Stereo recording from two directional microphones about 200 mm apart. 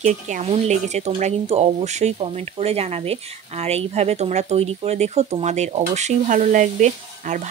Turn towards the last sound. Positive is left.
turn(degrees=-35)  # may be behind; listen again after turning